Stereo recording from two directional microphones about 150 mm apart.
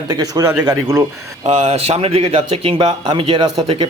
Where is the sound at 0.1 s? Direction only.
25° right (ahead or behind).